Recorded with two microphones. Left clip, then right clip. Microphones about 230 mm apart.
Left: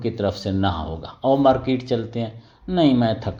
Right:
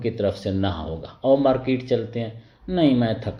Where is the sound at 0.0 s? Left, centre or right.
Left.